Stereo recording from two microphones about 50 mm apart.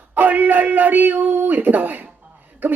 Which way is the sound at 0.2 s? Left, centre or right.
Right.